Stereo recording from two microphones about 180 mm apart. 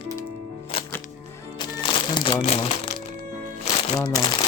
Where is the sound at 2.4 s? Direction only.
35° left (ahead or behind).